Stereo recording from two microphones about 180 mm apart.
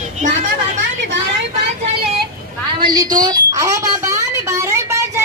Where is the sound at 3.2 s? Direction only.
20° right (ahead or behind).